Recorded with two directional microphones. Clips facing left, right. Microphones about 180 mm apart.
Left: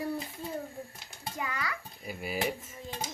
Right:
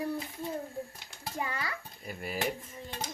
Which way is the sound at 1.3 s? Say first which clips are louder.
Even; 30° right (ahead or behind).